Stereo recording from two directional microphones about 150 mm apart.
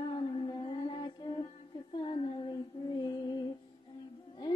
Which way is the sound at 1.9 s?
30° left (ahead or behind).